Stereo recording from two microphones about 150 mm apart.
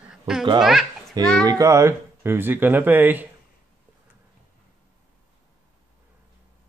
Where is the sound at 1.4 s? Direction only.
20° right (ahead or behind).